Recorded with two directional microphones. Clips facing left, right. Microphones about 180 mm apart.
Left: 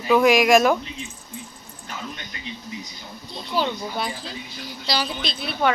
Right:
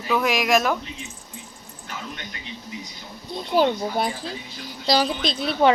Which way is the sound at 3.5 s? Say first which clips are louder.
Right 5 dB; 50° right (ahead or behind).